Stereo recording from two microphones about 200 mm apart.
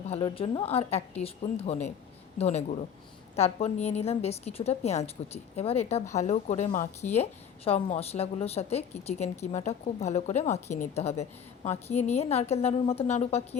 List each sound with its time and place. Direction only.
0.1 s a woman's voice: 25° left (ahead or behind)